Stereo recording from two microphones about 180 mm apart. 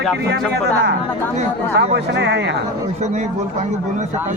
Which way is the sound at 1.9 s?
70° right (ahead or behind).